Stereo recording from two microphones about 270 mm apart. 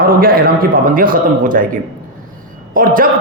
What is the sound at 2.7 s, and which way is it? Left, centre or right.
Speech, right.